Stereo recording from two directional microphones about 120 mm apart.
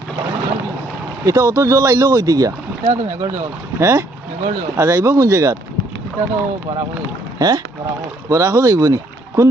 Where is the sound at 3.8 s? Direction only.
25° right (ahead or behind).